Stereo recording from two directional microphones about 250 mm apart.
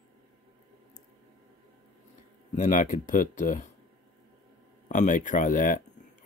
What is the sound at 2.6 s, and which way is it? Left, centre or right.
Speech, left.